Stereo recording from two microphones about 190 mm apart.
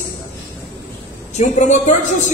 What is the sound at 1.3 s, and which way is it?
Speech, 40° left (ahead or behind).